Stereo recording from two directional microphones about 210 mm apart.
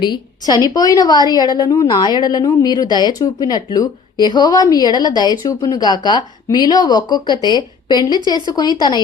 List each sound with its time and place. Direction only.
0.0 s speech: 20° left (ahead or behind)